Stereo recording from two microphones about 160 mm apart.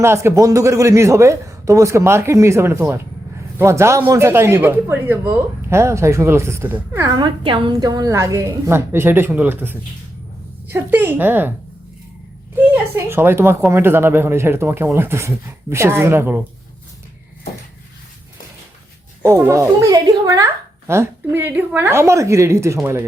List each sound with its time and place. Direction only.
0.0 s speech: 15° right (ahead or behind)
7.2 s a woman's voice: 30° right (ahead or behind); by 11.5 s 10° right (ahead or behind)
12.5 s speech: 15° right (ahead or behind)
19.5 s speech: 20° right (ahead or behind)